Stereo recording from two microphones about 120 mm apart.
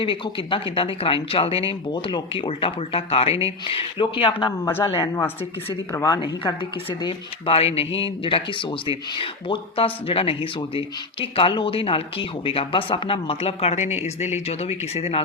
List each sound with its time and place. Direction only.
0.0 s speech: 45° left (ahead or behind)
5.9 s speech: 25° left (ahead or behind)
6.4 s speech: 45° left (ahead or behind); by 15.2 s 60° left (ahead or behind)